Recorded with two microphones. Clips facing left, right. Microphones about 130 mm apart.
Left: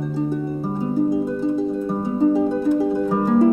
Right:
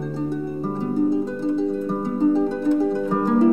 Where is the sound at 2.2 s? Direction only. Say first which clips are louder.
Left 2 dB; 10° left (ahead or behind).